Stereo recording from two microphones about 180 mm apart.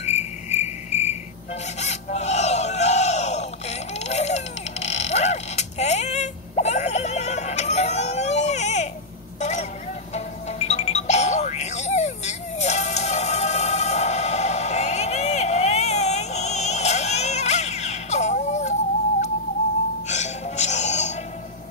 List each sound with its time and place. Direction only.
0.0 s cricket: 40° left (ahead or behind)
1.8 s a sound: 40° left (ahead or behind)
10.1 s music: 40° left (ahead or behind)
20.1 s music: 40° left (ahead or behind)